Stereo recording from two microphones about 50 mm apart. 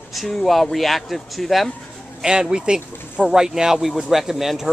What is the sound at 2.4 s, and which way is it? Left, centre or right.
Speech, centre.